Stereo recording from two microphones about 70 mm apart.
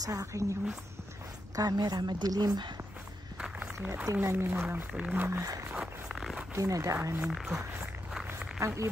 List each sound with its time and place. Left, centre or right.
0.0 s speech: right
1.5 s speech: right
3.3 s a sound: centre
3.9 s speech: right
5.4 s speech: right
5.8 s a sound: centre
6.5 s speech: right
7.2 s speech: centre
7.8 s walk: centre
8.5 s speech: right